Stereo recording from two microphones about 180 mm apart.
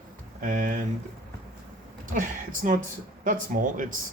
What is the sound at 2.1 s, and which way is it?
Speech, 45° right (ahead or behind).